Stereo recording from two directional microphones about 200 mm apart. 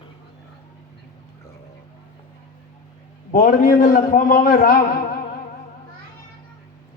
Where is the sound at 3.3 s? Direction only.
45° left (ahead or behind).